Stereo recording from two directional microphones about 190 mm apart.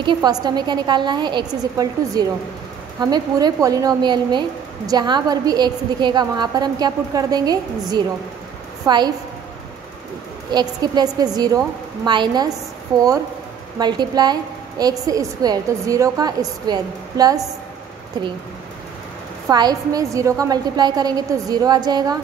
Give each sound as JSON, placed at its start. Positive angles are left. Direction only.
{"t": 0.0, "sound": "a woman's voice", "side_deg": -25}
{"t": 10.5, "sound": "a woman's voice", "side_deg": -20}
{"t": 13.7, "sound": "a woman's voice", "side_deg": -20}
{"t": 19.4, "sound": "a woman's voice", "side_deg": -20}